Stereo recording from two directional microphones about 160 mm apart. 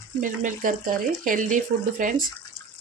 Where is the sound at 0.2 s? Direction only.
55° right (ahead or behind).